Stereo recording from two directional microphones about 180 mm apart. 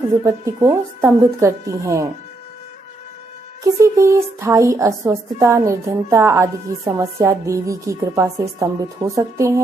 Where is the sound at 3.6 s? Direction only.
15° right (ahead or behind).